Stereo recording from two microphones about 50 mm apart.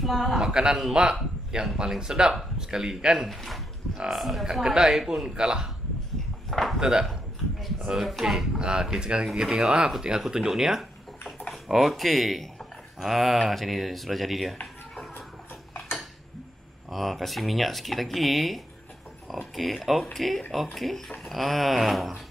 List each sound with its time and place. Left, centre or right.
0.0 s speech: centre
0.3 s speech: centre
3.3 s speech: centre
3.9 s speech: centre
4.2 s speech: centre
6.5 s a sound: centre
6.8 s speech: centre
8.5 s speech: centre
16.9 s speech: centre